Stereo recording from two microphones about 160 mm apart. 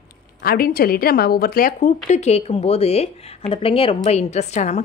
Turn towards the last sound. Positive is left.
turn(degrees=45)  # may be behind; listen again after turning